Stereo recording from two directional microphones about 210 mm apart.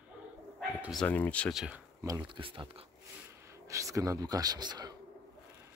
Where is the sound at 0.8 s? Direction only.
Centre (ahead or behind).